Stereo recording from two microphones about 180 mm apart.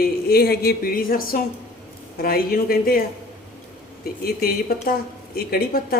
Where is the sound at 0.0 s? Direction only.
60° left (ahead or behind).